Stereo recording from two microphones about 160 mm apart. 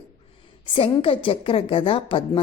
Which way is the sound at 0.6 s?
35° left (ahead or behind).